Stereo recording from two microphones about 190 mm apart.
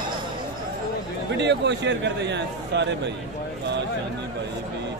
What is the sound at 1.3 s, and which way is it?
A man's voice, 65° right (ahead or behind).